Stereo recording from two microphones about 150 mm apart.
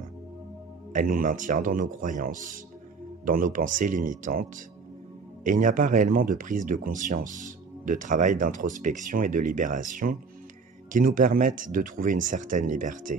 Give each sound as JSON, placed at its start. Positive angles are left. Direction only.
{"t": 0.9, "sound": "speech", "side_deg": -65}